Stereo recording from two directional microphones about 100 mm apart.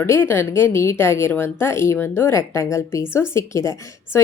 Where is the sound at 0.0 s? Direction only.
25° left (ahead or behind).